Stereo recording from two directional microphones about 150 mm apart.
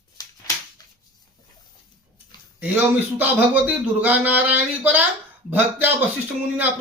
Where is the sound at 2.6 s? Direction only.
10° right (ahead or behind).